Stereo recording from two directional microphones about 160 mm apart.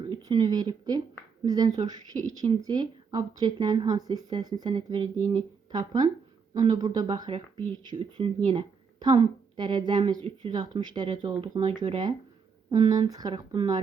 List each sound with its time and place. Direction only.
0.1 s speech: 25° right (ahead or behind)